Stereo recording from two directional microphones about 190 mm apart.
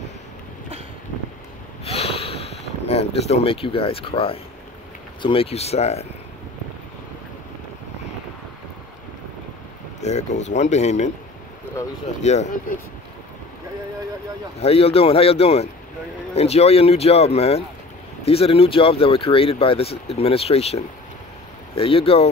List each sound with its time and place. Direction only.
1.9 s snort: 30° left (ahead or behind)
5.2 s speech: 30° left (ahead or behind)
9.9 s speech: 35° left (ahead or behind)
12.2 s speech: 35° left (ahead or behind)
14.6 s speech: 30° left (ahead or behind)